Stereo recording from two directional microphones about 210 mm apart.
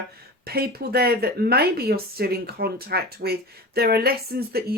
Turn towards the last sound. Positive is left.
turn(degrees=-45)  # may be behind; listen again after turning